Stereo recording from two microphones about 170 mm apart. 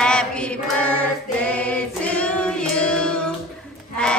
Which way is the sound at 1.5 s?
10° left (ahead or behind).